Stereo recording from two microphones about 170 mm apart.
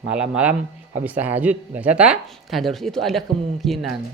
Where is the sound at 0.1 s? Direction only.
5° right (ahead or behind).